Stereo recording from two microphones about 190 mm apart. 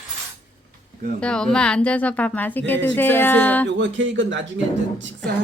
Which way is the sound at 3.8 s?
75° right (ahead or behind).